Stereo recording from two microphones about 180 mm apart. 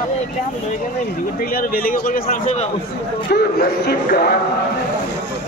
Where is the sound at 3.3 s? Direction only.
60° left (ahead or behind).